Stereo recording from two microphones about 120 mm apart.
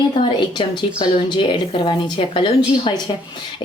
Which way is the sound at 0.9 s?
45° left (ahead or behind).